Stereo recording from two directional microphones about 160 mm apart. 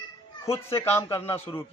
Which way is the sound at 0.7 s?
15° left (ahead or behind).